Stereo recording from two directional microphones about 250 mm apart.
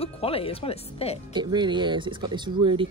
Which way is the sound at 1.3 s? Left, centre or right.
Centre.